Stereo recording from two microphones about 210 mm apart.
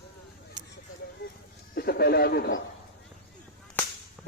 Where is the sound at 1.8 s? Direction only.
50° left (ahead or behind).